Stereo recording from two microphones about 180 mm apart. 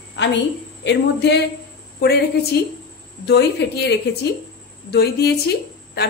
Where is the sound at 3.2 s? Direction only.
65° left (ahead or behind).